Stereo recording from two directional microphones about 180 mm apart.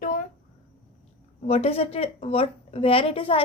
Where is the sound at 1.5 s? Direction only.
35° left (ahead or behind).